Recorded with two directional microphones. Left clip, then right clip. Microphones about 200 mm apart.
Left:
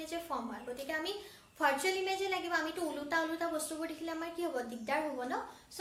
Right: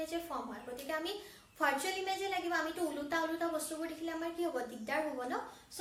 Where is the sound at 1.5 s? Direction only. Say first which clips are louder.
Left 2 dB; 25° left (ahead or behind).